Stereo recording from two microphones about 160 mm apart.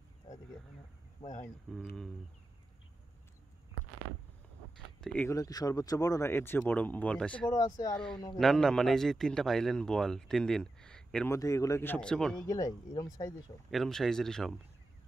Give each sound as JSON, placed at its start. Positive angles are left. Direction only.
{"t": 1.7, "sound": "a man's voice", "side_deg": 0}
{"t": 5.0, "sound": "speech", "side_deg": 10}
{"t": 5.3, "sound": "speech", "side_deg": 20}
{"t": 7.4, "sound": "speech", "side_deg": 25}
{"t": 8.4, "sound": "a man's voice", "side_deg": 5}
{"t": 11.2, "sound": "speech", "side_deg": 20}
{"t": 12.4, "sound": "speech", "side_deg": 20}
{"t": 13.7, "sound": "a man's voice", "side_deg": 0}